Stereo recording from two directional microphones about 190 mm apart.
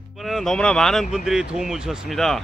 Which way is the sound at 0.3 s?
Centre (ahead or behind).